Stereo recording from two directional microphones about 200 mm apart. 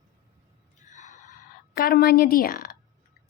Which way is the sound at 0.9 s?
35° left (ahead or behind).